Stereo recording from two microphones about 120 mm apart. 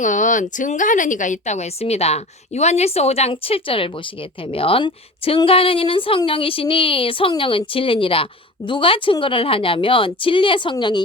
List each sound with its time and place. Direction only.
0.0 s a woman's voice: 90° left; by 11.0 s 40° left (ahead or behind)